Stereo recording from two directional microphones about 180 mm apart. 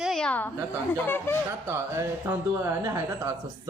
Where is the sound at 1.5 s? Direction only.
15° right (ahead or behind).